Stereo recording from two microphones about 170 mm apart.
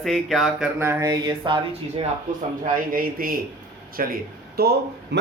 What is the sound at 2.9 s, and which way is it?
A man's voice, 55° right (ahead or behind).